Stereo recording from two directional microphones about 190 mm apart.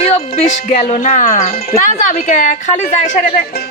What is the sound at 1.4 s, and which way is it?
Speech, 30° left (ahead or behind).